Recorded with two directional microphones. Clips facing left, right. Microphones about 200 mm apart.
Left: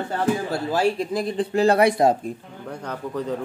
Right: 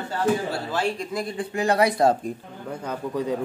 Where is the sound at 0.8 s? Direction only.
5° left (ahead or behind).